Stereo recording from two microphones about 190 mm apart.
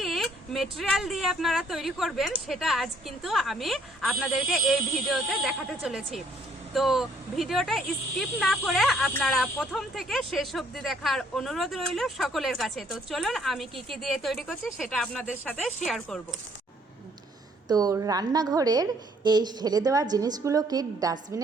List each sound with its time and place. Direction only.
0.0 s speech: centre (ahead or behind)
17.7 s a woman's voice: 20° right (ahead or behind)